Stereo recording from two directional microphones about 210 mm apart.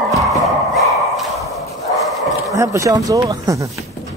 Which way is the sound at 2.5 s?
15° right (ahead or behind).